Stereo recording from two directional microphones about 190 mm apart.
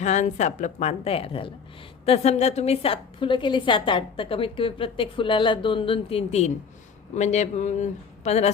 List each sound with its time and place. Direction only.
0.0 s a woman's voice: 40° left (ahead or behind)